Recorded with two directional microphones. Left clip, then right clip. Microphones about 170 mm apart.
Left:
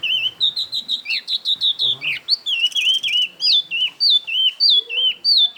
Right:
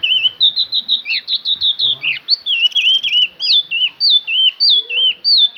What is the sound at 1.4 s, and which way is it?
Chirp, 20° left (ahead or behind).